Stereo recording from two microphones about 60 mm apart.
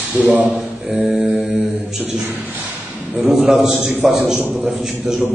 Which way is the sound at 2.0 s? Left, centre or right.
Right.